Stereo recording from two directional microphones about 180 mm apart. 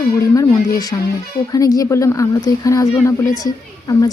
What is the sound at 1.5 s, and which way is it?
Speech, 20° left (ahead or behind).